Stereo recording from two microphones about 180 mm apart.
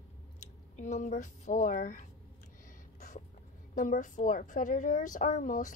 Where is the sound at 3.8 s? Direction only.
45° left (ahead or behind).